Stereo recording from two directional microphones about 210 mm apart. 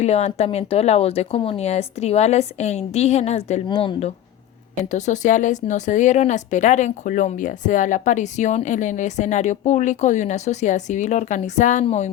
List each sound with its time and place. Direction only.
0.0 s speech: 30° left (ahead or behind)